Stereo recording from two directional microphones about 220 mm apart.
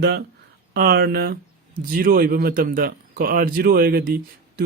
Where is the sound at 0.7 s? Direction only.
45° right (ahead or behind).